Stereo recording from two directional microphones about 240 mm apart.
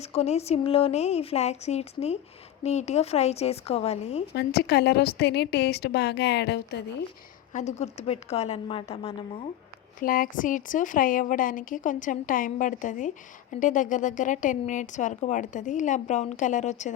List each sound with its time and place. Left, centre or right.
0.0 s speech: left
4.3 s a woman's voice: left
7.5 s speech: left
10.0 s speech: left